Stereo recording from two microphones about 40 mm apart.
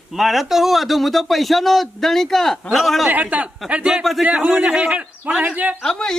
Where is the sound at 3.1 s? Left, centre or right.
Right.